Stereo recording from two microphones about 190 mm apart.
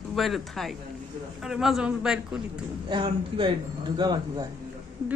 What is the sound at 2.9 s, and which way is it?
A man's voice, 25° right (ahead or behind).